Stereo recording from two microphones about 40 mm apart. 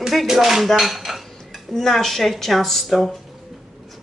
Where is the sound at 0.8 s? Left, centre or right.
Centre.